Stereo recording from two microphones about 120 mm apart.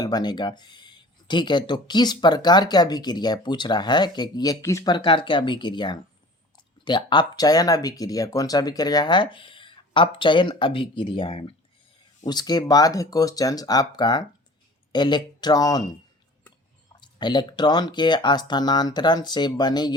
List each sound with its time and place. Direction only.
0.0 s speech: 35° left (ahead or behind)
12.2 s speech: 35° left (ahead or behind)
17.0 s speech: 40° left (ahead or behind)